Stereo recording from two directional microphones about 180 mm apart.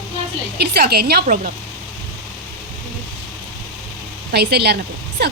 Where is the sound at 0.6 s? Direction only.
65° right (ahead or behind).